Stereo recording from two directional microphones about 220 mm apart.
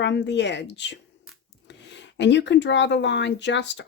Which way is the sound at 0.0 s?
55° left (ahead or behind).